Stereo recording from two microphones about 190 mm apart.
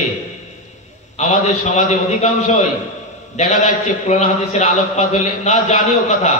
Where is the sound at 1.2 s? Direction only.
35° left (ahead or behind).